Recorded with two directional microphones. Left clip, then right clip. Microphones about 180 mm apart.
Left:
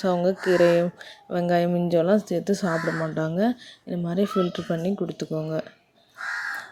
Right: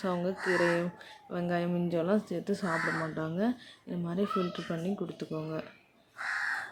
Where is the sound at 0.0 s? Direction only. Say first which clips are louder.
Left 9 dB; 30° left (ahead or behind).